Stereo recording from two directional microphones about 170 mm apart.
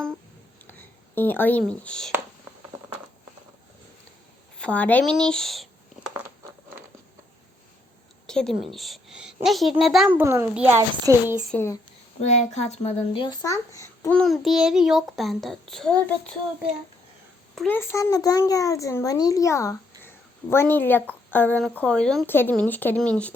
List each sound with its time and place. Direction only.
0.7 s speech: 10° left (ahead or behind)
4.5 s speech: 5° left (ahead or behind)
8.3 s a child's voice: 5° left (ahead or behind)
10.1 s a child's voice: 15° right (ahead or behind)
11.5 s speech: 15° left (ahead or behind)
12.2 s speech: 40° left (ahead or behind)
13.4 s speech: 20° left (ahead or behind)
14.2 s a child's voice: centre (ahead or behind)
17.5 s a sound: centre (ahead or behind)
17.7 s a child's voice: 20° left (ahead or behind)